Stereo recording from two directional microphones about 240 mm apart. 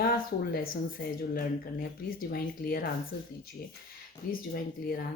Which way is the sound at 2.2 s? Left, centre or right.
Left.